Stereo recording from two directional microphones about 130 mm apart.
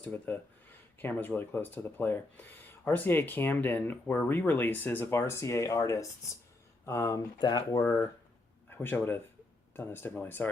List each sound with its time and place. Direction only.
0.0 s speech: 15° left (ahead or behind)